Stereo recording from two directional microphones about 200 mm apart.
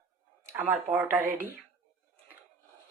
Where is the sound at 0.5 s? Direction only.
10° right (ahead or behind).